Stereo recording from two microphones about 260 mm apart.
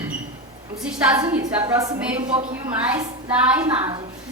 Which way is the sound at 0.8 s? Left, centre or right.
Centre.